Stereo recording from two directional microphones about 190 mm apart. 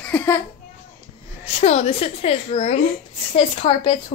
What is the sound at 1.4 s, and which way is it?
A woman's voice, 30° left (ahead or behind).